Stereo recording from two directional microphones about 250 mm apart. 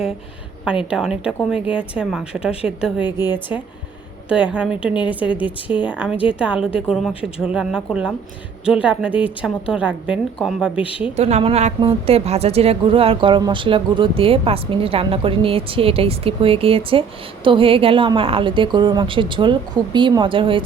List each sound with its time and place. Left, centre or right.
0.9 s a woman's voice: centre
4.3 s a woman's voice: centre
7.1 s speech: left
7.4 s a woman's voice: centre
11.2 s a woman's voice: right